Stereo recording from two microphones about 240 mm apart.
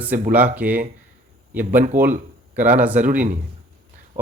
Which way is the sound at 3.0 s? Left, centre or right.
Right.